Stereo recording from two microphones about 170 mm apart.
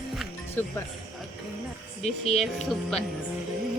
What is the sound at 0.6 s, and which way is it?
Speech, 10° left (ahead or behind).